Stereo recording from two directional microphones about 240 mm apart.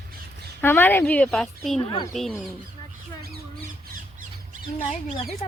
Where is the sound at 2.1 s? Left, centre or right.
Centre.